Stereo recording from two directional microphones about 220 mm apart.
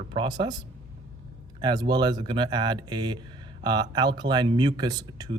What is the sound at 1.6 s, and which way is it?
Speech, 20° right (ahead or behind).